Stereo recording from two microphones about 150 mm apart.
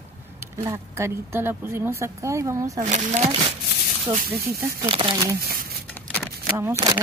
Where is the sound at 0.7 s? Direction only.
20° right (ahead or behind).